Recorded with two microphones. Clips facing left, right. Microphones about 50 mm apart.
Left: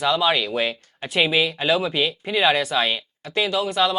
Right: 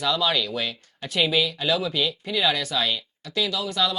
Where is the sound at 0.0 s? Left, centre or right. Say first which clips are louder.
Left 4 dB; left.